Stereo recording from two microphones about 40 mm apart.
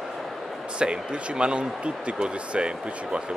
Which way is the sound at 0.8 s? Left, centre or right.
Right.